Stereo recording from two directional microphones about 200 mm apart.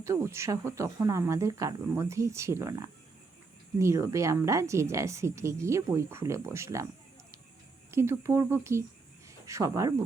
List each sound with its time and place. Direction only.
0.0 s a woman's voice: 15° right (ahead or behind)
7.9 s a woman's voice: 15° right (ahead or behind)